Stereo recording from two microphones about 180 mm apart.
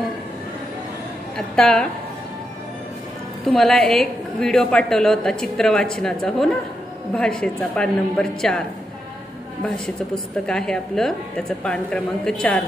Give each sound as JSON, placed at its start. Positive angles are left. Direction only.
{"t": 1.3, "sound": "a woman's voice", "side_deg": 5}
{"t": 3.4, "sound": "a woman's voice", "side_deg": 0}
{"t": 9.8, "sound": "a woman's voice", "side_deg": 5}